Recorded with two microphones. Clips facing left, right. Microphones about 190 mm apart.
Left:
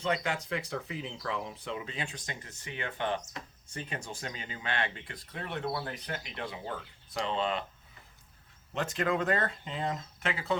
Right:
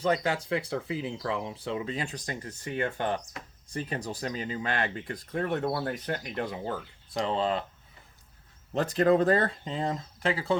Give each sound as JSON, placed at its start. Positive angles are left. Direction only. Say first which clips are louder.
{"t": 0.0, "sound": "speech", "louder": "right 5 dB", "side_deg": -35}
{"t": 8.7, "sound": "speech", "louder": "right 8 dB", "side_deg": -35}